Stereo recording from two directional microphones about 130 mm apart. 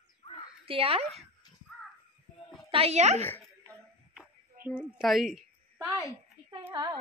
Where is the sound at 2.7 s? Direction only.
50° right (ahead or behind).